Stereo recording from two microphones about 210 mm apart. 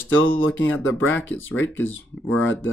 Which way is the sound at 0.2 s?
70° left (ahead or behind).